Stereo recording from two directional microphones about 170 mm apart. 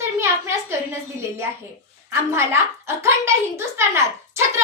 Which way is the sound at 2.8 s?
15° right (ahead or behind).